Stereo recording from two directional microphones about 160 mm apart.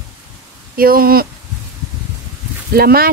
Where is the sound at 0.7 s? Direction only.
65° right (ahead or behind).